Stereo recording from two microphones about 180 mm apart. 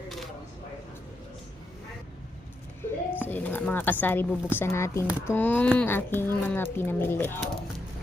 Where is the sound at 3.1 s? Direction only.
10° left (ahead or behind).